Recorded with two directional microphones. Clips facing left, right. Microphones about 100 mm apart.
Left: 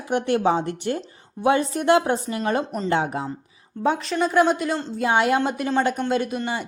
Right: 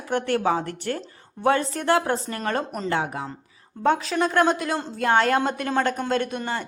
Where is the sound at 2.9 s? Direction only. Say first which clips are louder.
Left 4 dB; 20° left (ahead or behind).